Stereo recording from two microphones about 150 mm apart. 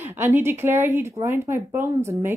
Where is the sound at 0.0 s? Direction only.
15° right (ahead or behind).